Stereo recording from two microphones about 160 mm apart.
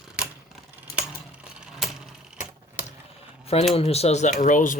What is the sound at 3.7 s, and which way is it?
Speech, 40° left (ahead or behind).